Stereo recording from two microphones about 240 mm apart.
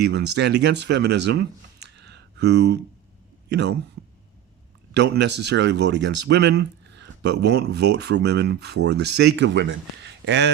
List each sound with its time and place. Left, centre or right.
0.0 s speech: right
4.9 s speech: right